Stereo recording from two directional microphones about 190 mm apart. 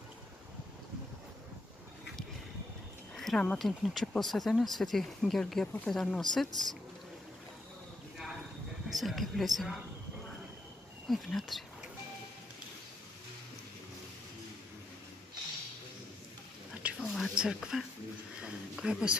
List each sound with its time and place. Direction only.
3.2 s speech: centre (ahead or behind)
8.8 s speech: centre (ahead or behind)
11.1 s speech: centre (ahead or behind)
16.8 s whispering: centre (ahead or behind)
18.4 s speech: 5° right (ahead or behind)